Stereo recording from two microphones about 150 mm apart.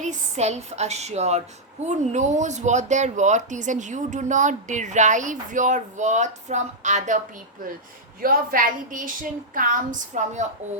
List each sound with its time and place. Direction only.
0.0 s speech: 50° right (ahead or behind)
8.2 s a woman's voice: 75° right (ahead or behind); by 10.4 s 55° right (ahead or behind)